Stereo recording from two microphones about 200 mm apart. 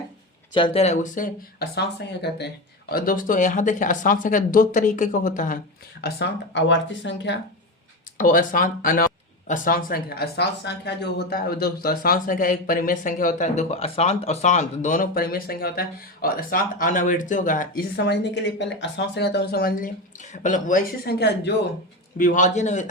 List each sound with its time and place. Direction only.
0.5 s speech: 25° left (ahead or behind); by 2.5 s 55° left (ahead or behind)
2.9 s speech: 45° left (ahead or behind)
6.0 s speech: 55° left (ahead or behind)
8.2 s speech: 40° left (ahead or behind)
22.2 s speech: 40° left (ahead or behind)